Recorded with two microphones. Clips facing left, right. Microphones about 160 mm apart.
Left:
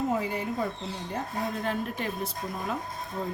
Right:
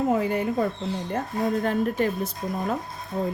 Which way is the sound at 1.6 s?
50° right (ahead or behind).